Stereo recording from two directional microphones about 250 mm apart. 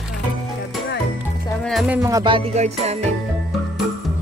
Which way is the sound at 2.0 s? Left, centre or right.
Centre.